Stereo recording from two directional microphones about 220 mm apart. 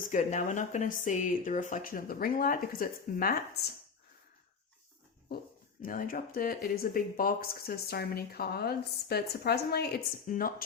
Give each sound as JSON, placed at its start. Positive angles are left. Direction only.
{"t": 0.1, "sound": "speech", "side_deg": 35}
{"t": 5.8, "sound": "speech", "side_deg": 40}